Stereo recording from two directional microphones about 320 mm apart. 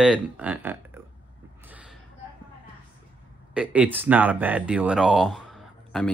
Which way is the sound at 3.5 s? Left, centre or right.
Centre.